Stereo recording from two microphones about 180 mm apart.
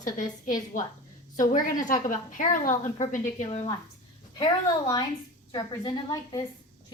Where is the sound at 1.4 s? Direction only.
45° left (ahead or behind).